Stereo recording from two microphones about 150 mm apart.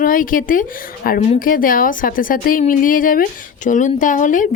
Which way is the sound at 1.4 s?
65° left (ahead or behind).